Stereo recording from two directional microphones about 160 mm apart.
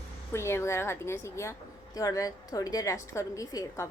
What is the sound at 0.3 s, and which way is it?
A woman's voice, 15° left (ahead or behind).